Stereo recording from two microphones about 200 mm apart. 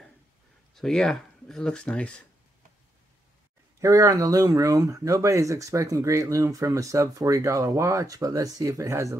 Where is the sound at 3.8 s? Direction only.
15° right (ahead or behind).